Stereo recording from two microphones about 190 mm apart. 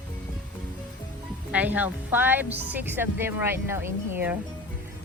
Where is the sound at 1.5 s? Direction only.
10° right (ahead or behind).